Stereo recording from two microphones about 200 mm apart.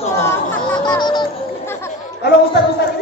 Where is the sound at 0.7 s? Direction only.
20° left (ahead or behind).